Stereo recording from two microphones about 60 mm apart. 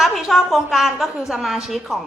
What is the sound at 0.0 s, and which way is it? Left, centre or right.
Speech, centre.